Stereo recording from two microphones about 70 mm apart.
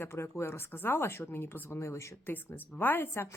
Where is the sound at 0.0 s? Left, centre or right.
Left.